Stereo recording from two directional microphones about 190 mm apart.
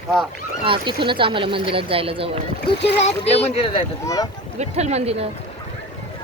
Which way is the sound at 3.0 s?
35° left (ahead or behind).